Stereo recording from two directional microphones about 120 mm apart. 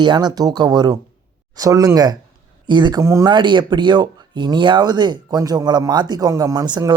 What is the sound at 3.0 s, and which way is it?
Speech, 25° right (ahead or behind).